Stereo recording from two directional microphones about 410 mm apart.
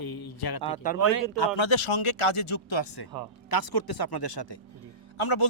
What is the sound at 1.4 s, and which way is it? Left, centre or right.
A man's voice, left.